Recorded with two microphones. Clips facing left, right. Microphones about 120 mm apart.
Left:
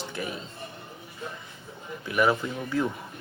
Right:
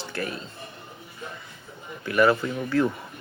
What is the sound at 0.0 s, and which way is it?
Music, 15° left (ahead or behind).